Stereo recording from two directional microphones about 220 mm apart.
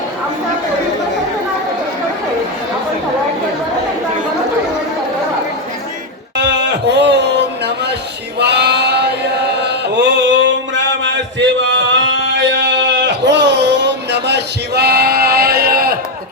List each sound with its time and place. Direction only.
6.3 s a sound: 50° right (ahead or behind)
8.4 s male singing: 50° right (ahead or behind)
9.6 s mantra: 50° right (ahead or behind)